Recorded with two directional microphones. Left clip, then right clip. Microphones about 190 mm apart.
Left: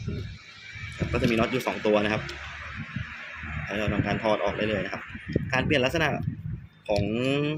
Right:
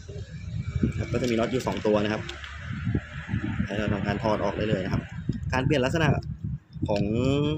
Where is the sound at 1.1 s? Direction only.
10° right (ahead or behind).